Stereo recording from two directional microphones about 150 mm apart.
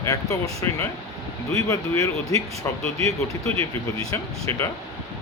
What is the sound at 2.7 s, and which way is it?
Speech, 15° left (ahead or behind).